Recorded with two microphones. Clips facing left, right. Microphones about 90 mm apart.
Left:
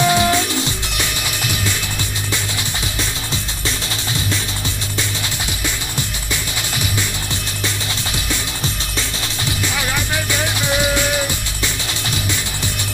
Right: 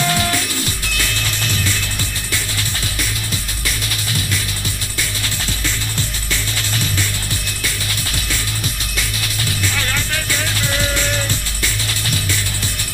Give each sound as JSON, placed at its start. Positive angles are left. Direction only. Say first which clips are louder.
{"t": 0.0, "sound": "music", "louder": "left 4 dB", "side_deg": 20}
{"t": 9.4, "sound": "music", "louder": "left 1 dB", "side_deg": 15}